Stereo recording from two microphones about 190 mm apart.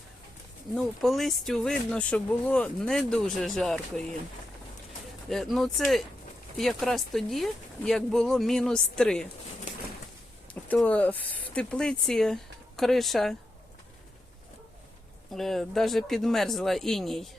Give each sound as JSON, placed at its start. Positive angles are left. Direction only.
{"t": 0.8, "sound": "speech", "side_deg": 0}
{"t": 5.3, "sound": "speech", "side_deg": 0}
{"t": 9.7, "sound": "pigeon", "side_deg": 40}
{"t": 10.5, "sound": "speech", "side_deg": 5}
{"t": 15.3, "sound": "speech", "side_deg": 0}